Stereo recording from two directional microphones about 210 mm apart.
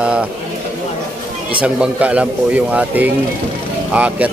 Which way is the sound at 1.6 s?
5° right (ahead or behind).